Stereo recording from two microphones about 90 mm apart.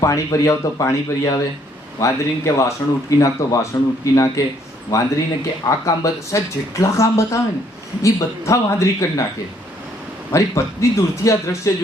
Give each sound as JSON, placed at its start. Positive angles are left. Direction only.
{"t": 0.0, "sound": "speech", "side_deg": 35}
{"t": 10.3, "sound": "speech", "side_deg": 35}